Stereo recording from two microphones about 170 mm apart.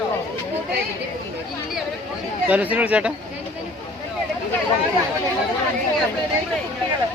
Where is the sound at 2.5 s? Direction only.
10° right (ahead or behind).